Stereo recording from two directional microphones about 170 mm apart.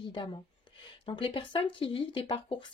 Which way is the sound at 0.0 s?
25° left (ahead or behind).